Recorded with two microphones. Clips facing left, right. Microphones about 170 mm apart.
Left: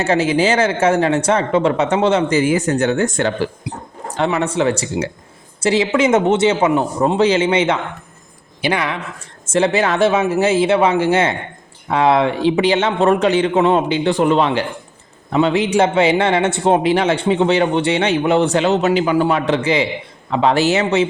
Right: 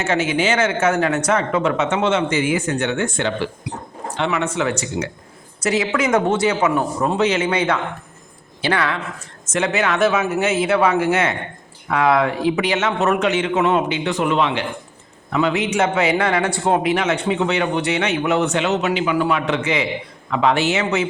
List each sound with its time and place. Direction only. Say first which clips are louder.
0.0 s a man's voice: left 4 dB; 35° left (ahead or behind); by 9.0 s 15° left (ahead or behind)
9.5 s a man's voice: left 4 dB; 30° left (ahead or behind)